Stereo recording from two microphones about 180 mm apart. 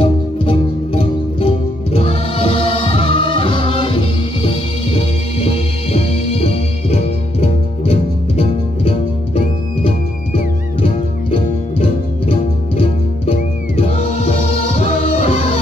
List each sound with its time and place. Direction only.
0.0 s music: 30° left (ahead or behind)